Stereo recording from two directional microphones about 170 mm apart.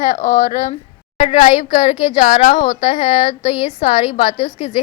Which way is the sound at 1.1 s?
35° left (ahead or behind).